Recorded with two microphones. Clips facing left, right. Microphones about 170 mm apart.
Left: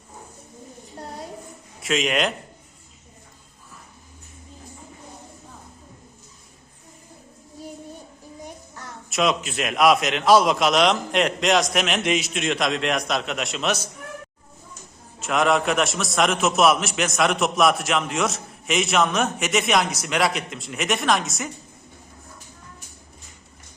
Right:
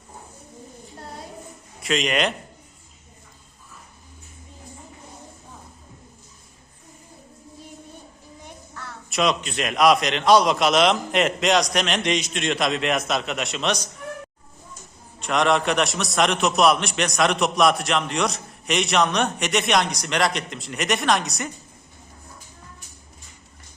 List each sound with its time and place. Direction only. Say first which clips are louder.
1.8 s a man's voice: even; centre (ahead or behind)
8.7 s a sound: right 1 dB; 20° left (ahead or behind)
9.0 s a man's voice: even; centre (ahead or behind)
15.2 s a man's voice: even; 5° left (ahead or behind)